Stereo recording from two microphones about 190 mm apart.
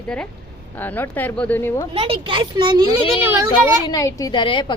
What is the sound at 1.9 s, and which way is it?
Speech, 30° right (ahead or behind).